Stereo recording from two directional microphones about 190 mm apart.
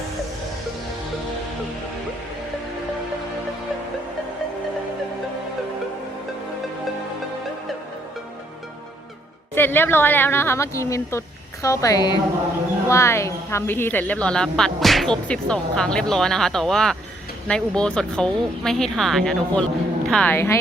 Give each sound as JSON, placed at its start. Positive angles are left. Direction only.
{"t": 9.6, "sound": "a woman's voice", "side_deg": 10}